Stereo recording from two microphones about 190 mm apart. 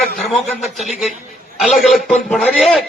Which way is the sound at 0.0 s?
Centre (ahead or behind).